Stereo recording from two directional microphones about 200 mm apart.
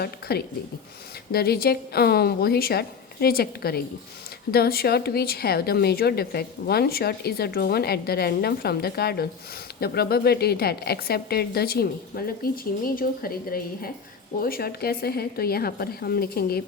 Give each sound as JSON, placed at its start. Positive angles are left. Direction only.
{"t": 0.0, "sound": "speech", "side_deg": 55}